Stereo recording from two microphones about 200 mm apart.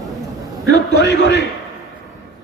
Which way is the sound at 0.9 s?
60° left (ahead or behind).